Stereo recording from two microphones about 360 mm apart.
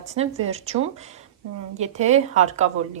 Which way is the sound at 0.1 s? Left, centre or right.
Centre.